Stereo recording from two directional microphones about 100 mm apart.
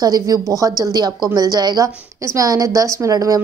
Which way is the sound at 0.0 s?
40° right (ahead or behind).